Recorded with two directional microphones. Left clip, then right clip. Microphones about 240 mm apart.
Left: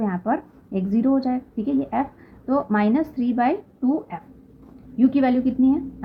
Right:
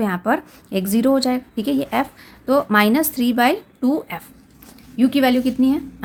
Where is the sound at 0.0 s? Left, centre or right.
Right.